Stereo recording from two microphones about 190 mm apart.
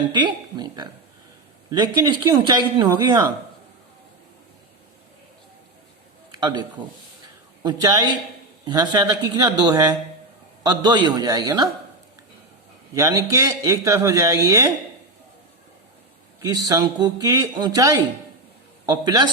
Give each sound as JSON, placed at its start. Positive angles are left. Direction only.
{"t": 0.1, "sound": "a man's voice", "side_deg": -25}
{"t": 6.3, "sound": "a man's voice", "side_deg": -20}
{"t": 12.9, "sound": "a man's voice", "side_deg": -15}
{"t": 16.4, "sound": "a man's voice", "side_deg": -20}